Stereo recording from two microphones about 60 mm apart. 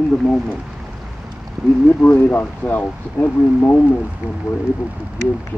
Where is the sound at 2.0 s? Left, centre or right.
Left.